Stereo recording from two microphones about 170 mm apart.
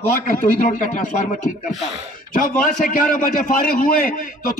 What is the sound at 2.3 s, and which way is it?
A man's voice, 50° left (ahead or behind).